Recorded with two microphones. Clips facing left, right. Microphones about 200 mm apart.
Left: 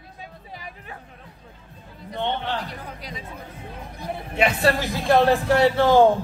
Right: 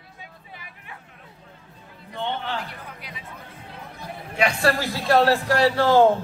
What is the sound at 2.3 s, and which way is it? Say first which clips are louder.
Speech: left 1 dB; 35° left (ahead or behind).